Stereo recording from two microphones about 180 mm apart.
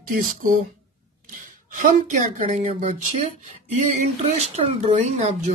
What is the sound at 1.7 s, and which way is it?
Speech, 45° right (ahead or behind).